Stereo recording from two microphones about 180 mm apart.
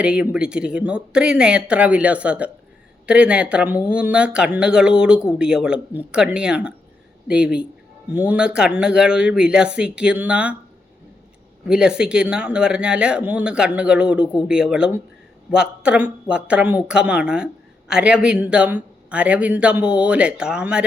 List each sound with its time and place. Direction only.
0.0 s a woman's voice: 5° right (ahead or behind)
11.6 s a woman's voice: 5° right (ahead or behind)